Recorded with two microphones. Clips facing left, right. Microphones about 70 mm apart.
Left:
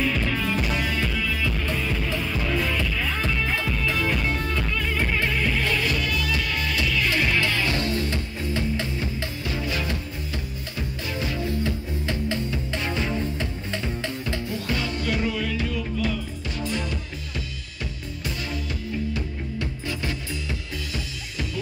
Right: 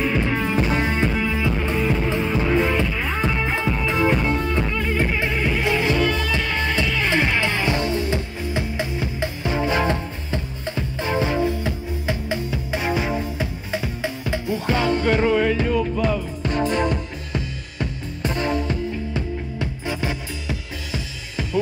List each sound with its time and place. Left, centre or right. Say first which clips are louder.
0.0 s music: right 3 dB; right